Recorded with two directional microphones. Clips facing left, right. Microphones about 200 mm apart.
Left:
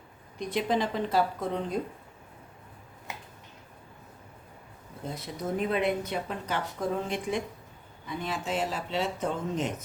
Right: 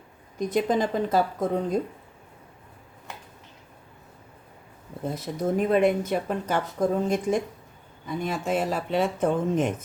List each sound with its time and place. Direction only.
0.3 s a woman's voice: 45° right (ahead or behind)
5.0 s a woman's voice: 45° right (ahead or behind)